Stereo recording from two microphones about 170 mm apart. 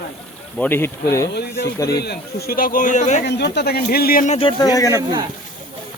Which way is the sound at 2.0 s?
70° left (ahead or behind).